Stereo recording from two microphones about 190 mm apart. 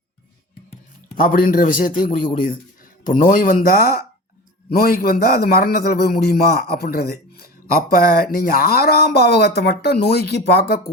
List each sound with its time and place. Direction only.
1.1 s a man's voice: 45° left (ahead or behind)